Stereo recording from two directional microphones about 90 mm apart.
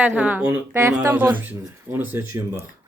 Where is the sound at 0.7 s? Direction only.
35° right (ahead or behind).